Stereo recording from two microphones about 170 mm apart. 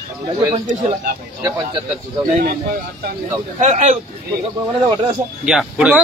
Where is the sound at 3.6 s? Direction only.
45° right (ahead or behind).